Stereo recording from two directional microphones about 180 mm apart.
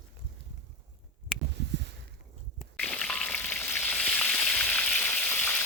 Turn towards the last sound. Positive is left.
turn(degrees=10)  # may be behind; listen again after turning